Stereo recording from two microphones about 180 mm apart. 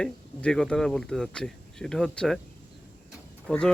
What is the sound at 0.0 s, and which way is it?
Speech, 5° left (ahead or behind).